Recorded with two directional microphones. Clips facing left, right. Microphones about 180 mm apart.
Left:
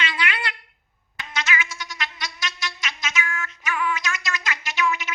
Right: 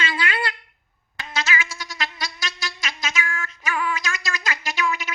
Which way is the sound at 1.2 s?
30° right (ahead or behind).